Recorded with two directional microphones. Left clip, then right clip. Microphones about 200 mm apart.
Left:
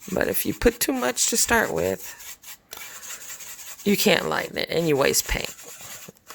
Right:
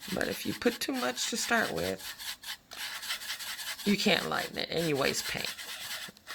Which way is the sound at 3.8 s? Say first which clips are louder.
Left 8 dB; 55° left (ahead or behind).